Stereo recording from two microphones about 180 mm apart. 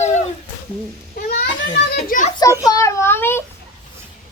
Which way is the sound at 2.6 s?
15° left (ahead or behind).